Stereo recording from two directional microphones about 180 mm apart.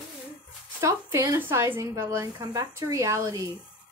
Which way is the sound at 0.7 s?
15° right (ahead or behind).